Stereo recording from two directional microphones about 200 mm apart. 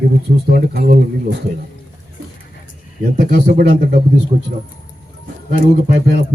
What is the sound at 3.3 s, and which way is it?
Speech, 50° right (ahead or behind).